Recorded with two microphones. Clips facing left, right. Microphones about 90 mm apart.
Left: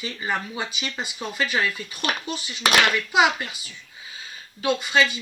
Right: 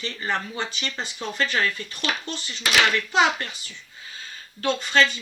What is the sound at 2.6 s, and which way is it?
Speech, 60° left (ahead or behind).